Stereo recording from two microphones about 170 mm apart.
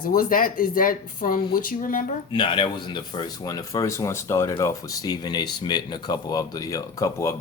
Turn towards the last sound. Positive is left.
turn(degrees=20)  # may be behind; listen again after turning